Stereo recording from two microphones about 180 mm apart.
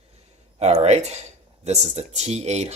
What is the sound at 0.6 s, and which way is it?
Speech, 35° right (ahead or behind).